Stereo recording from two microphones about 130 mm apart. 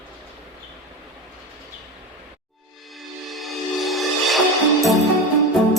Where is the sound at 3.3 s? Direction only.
Centre (ahead or behind).